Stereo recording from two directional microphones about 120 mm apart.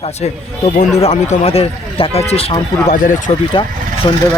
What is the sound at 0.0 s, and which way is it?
Speech, 65° left (ahead or behind).